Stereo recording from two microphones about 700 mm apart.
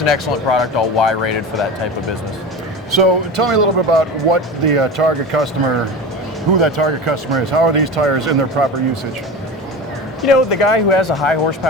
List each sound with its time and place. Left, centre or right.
0.0 s speech: left
2.9 s speech: right
10.2 s speech: left